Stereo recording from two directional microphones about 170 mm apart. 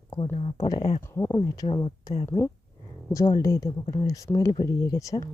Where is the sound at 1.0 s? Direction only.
15° left (ahead or behind).